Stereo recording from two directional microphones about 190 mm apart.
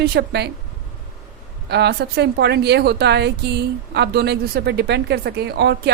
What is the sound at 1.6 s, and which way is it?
A woman's voice, 60° right (ahead or behind).